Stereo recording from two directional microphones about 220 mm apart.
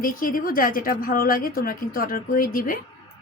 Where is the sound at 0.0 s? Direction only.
40° left (ahead or behind).